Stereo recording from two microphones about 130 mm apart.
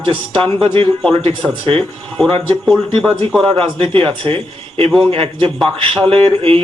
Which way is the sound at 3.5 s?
45° right (ahead or behind).